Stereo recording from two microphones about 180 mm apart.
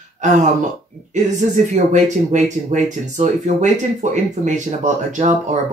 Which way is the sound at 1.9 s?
40° right (ahead or behind).